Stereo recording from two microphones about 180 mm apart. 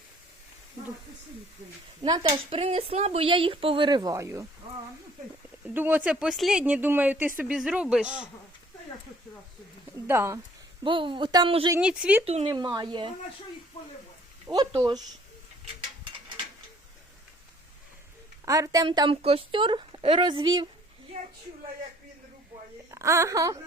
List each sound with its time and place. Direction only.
2.0 s speech: 25° right (ahead or behind)
5.6 s speech: 10° right (ahead or behind)
10.1 s speech: 15° right (ahead or behind)
10.8 s speech: 25° right (ahead or behind)
11.7 s speech: 5° right (ahead or behind)
12.2 s speech: 35° right (ahead or behind)
14.4 s speech: 20° right (ahead or behind)
18.4 s speech: 20° right (ahead or behind)
22.9 s a woman's voice: 15° right (ahead or behind)